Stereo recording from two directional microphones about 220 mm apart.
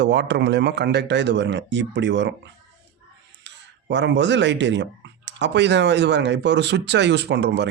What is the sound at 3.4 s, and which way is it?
Speech, 55° right (ahead or behind).